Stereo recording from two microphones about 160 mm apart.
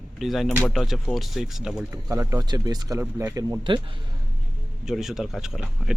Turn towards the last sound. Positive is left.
turn(degrees=-5)  # may be behind; listen again after turning